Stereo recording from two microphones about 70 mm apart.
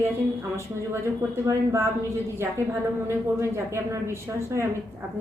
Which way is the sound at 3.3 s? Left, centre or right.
Right.